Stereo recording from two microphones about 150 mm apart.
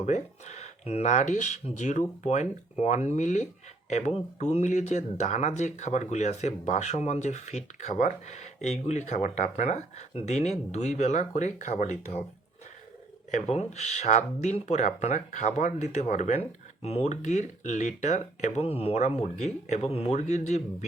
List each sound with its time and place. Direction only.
0.0 s speech: 50° left (ahead or behind)
13.3 s speech: 50° left (ahead or behind)